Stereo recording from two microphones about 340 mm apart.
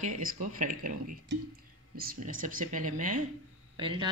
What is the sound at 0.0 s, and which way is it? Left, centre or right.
Speech, right.